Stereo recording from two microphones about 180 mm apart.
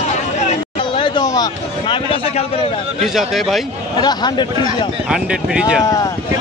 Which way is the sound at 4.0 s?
25° left (ahead or behind).